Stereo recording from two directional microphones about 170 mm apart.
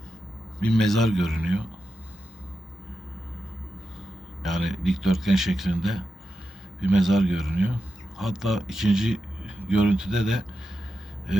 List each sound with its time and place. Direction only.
0.6 s speech: centre (ahead or behind)
4.4 s speech: centre (ahead or behind)